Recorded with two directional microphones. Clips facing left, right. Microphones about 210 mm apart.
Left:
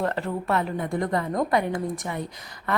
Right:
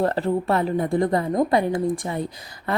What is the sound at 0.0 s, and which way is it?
A woman's voice, 35° right (ahead or behind).